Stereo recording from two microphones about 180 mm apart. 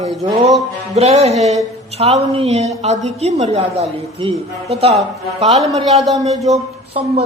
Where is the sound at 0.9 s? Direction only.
35° right (ahead or behind).